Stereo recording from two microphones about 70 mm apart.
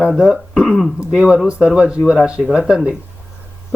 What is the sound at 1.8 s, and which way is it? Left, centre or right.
Speech, centre.